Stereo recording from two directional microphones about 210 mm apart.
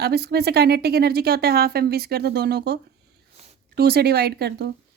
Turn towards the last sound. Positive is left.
turn(degrees=-50)  # may be behind; listen again after turning